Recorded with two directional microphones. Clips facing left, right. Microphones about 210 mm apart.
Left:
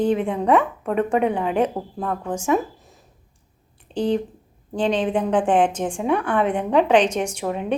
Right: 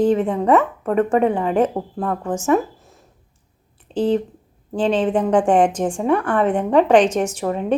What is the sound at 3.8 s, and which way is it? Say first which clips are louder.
A woman's voice: right 3 dB; 5° right (ahead or behind).